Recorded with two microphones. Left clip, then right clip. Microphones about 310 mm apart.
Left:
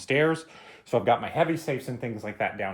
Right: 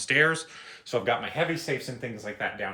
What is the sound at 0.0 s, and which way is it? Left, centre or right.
Speech, centre.